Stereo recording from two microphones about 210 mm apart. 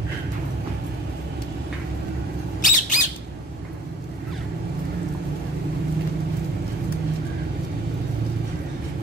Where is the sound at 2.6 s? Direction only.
40° left (ahead or behind).